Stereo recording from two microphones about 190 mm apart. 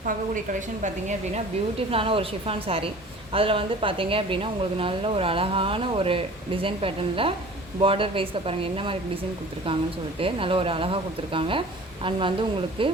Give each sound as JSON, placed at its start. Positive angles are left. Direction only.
{"t": 1.9, "sound": "a woman's voice", "side_deg": -30}
{"t": 10.2, "sound": "a woman's voice", "side_deg": -30}